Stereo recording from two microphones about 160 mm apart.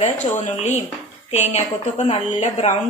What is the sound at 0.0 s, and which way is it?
Speech, 45° left (ahead or behind).